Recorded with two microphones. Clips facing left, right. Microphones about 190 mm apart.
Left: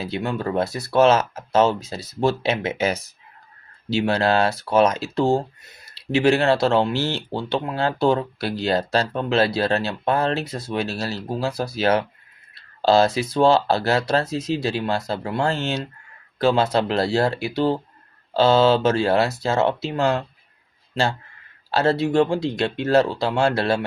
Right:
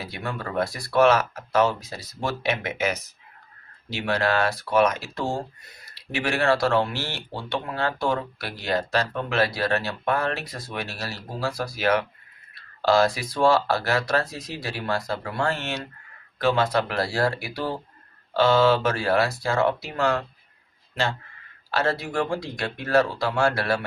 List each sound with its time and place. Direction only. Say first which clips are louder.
0.0 s speech: left 7 dB; 25° left (ahead or behind)
21.7 s speech: left 6 dB; 25° left (ahead or behind)